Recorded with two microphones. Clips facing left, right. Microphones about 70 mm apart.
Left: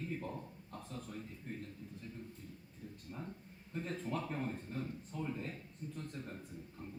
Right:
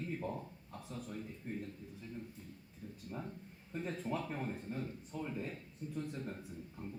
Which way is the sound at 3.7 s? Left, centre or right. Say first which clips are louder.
Right 1 dB; centre.